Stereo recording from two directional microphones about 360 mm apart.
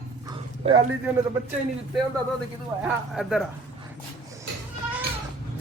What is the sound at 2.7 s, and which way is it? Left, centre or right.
Speech, centre.